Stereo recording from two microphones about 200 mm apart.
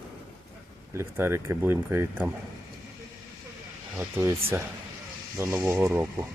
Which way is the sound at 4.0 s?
15° right (ahead or behind).